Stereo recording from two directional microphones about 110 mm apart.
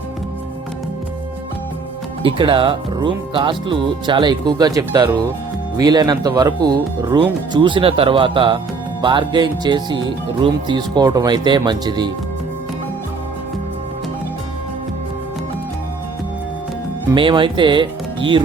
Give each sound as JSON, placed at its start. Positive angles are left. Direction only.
{"t": 2.2, "sound": "speech", "side_deg": -50}
{"t": 17.2, "sound": "speech", "side_deg": -50}